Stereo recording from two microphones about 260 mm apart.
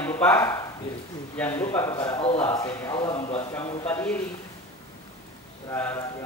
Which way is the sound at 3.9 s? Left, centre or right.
Centre.